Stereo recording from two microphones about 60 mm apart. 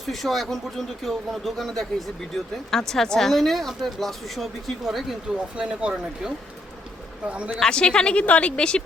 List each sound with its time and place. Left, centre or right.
0.0 s speech: centre
5.5 s a man's voice: centre
7.6 s a woman's voice: centre